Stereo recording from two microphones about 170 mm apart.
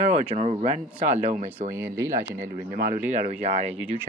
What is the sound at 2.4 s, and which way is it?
Speech, 55° right (ahead or behind).